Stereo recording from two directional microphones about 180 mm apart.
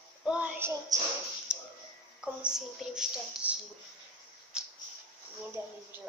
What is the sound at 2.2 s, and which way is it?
A woman's voice, 5° right (ahead or behind).